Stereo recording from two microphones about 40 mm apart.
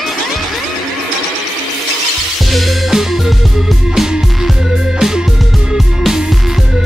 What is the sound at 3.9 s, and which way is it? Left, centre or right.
Music, centre.